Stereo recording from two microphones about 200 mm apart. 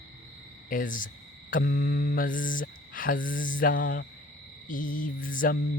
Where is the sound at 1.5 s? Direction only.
45° left (ahead or behind).